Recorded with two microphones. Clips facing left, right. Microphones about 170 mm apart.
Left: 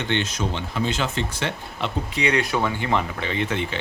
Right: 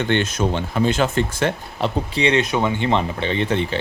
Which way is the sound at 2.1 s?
25° right (ahead or behind).